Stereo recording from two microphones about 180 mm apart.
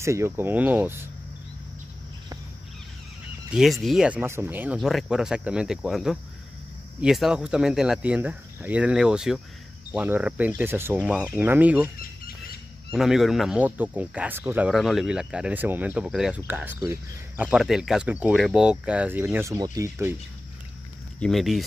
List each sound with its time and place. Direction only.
0.0 s speech: 15° right (ahead or behind)
3.5 s speech: centre (ahead or behind)
12.9 s speech: centre (ahead or behind)
21.2 s speech: centre (ahead or behind)